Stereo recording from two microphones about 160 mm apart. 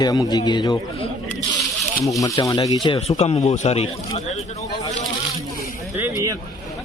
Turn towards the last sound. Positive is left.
turn(degrees=-15)  # may be behind; listen again after turning